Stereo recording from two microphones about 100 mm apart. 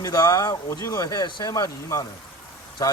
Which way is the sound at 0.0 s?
35° left (ahead or behind).